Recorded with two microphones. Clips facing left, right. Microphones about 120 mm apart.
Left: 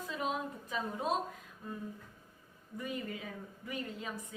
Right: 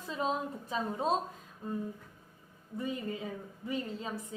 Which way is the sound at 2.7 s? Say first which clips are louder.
Right 4 dB; 25° right (ahead or behind).